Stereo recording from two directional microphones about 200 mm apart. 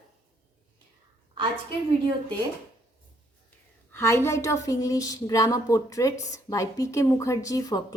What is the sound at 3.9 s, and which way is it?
Speech, 15° left (ahead or behind).